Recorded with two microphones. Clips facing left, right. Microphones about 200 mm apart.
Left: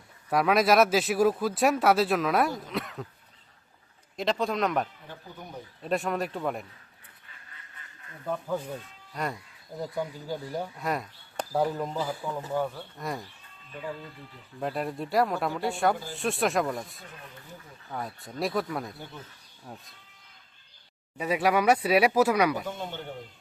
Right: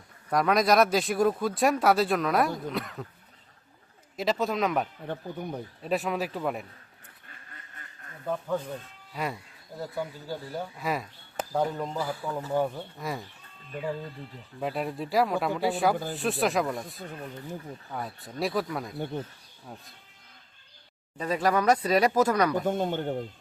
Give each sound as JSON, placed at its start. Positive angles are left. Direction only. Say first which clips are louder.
{"t": 0.3, "sound": "speech", "louder": "left 1 dB", "side_deg": 5}
{"t": 4.2, "sound": "speech", "louder": "even", "side_deg": -5}
{"t": 5.1, "sound": "speech", "louder": "right 10 dB", "side_deg": -60}
{"t": 5.8, "sound": "speech", "louder": "even", "side_deg": 0}
{"t": 8.3, "sound": "speech", "louder": "right 1 dB", "side_deg": 5}
{"t": 9.9, "sound": "speech", "louder": "left 1 dB", "side_deg": 15}
{"t": 10.8, "sound": "speech", "louder": "even", "side_deg": 0}
{"t": 13.0, "sound": "speech", "louder": "even", "side_deg": 0}
{"t": 14.6, "sound": "speech", "louder": "even", "side_deg": 0}
{"t": 18.9, "sound": "speech", "louder": "right 11 dB", "side_deg": -55}
{"t": 19.7, "sound": "speech", "louder": "even", "side_deg": 0}
{"t": 21.2, "sound": "speech", "louder": "left 1 dB", "side_deg": 10}
{"t": 22.6, "sound": "speech", "louder": "right 8 dB", "side_deg": -50}